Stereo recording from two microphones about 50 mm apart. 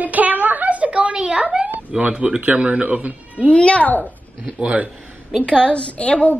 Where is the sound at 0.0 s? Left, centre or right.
Right.